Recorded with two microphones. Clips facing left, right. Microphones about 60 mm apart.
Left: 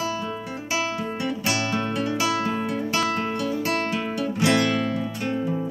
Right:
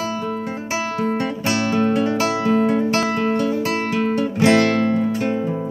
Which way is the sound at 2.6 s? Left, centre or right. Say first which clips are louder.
Right 6 dB; right.